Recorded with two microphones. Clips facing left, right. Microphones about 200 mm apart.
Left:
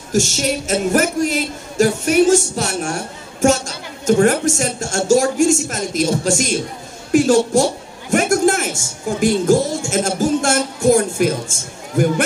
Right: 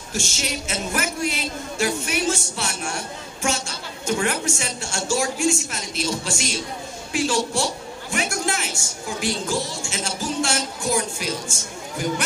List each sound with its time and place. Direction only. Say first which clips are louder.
0.1 s a man's voice: left 11 dB; 45° left (ahead or behind)